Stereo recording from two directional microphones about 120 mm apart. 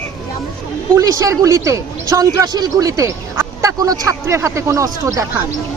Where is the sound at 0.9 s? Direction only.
25° right (ahead or behind).